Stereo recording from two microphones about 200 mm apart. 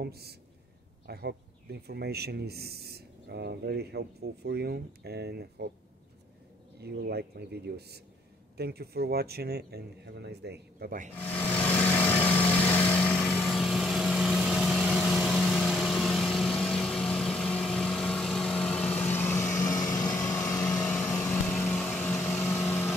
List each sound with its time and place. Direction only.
0.0 s speech: 55° right (ahead or behind)
6.8 s speech: 55° right (ahead or behind)
11.1 s vehicle: 10° left (ahead or behind)